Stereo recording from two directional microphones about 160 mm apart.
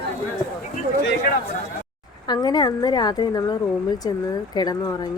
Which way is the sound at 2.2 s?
25° left (ahead or behind).